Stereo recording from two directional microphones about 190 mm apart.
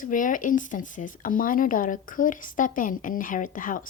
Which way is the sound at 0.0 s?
45° left (ahead or behind).